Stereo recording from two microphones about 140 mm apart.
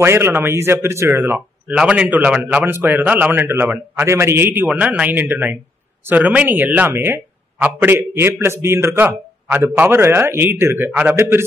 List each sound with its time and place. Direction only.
0.0 s speech: 15° right (ahead or behind)